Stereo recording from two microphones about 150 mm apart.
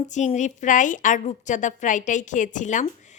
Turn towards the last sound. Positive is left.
turn(degrees=55)  # may be behind; listen again after turning